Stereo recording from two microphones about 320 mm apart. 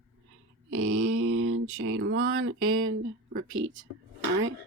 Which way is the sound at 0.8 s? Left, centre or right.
Right.